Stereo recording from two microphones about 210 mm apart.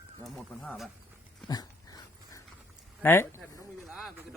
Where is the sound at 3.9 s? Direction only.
Centre (ahead or behind).